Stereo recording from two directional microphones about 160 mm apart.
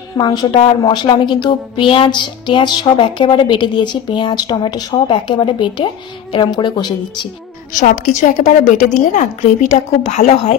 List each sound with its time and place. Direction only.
0.2 s speech: 25° left (ahead or behind)
7.7 s a woman's voice: 50° left (ahead or behind)